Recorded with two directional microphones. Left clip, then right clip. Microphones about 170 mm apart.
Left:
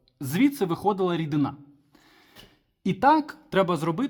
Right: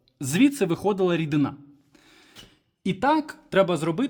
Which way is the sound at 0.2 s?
10° right (ahead or behind).